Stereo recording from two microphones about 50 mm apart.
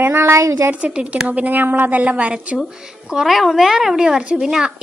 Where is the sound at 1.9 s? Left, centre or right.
Right.